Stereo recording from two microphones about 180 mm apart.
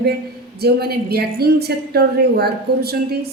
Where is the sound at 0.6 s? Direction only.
60° right (ahead or behind).